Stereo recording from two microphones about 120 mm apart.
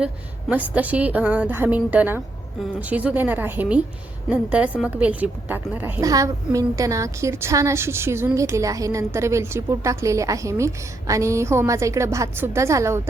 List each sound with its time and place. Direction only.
0.0 s a woman's voice: 10° right (ahead or behind)
6.0 s a woman's voice: 30° right (ahead or behind)